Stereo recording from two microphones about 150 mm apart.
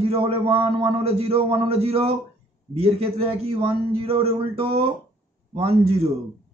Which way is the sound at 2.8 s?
40° right (ahead or behind).